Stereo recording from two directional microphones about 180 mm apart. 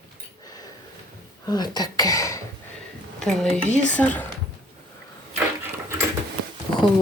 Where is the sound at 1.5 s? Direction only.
20° left (ahead or behind).